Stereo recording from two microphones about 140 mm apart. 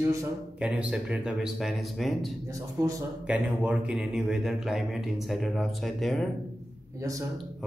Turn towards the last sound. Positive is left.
turn(degrees=-25)  # may be behind; listen again after turning